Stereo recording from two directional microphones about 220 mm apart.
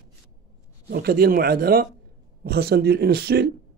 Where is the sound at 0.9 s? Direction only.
45° right (ahead or behind).